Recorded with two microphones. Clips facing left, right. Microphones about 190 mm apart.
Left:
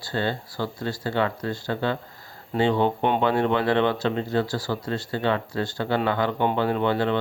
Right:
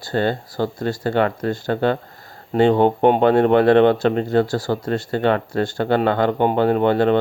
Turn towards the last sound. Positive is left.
turn(degrees=-50)  # may be behind; listen again after turning